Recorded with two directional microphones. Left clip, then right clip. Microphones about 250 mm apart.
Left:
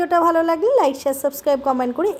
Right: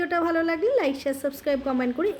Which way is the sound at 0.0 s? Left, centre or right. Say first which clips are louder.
Left 8 dB; centre.